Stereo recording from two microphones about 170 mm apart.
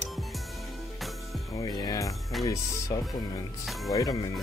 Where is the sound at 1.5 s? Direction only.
20° left (ahead or behind).